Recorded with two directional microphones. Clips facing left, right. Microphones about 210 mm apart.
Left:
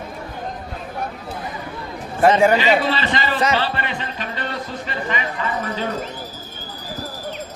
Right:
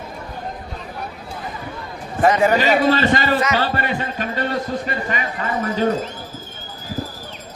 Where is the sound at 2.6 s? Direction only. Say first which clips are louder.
Right 3 dB; 45° right (ahead or behind).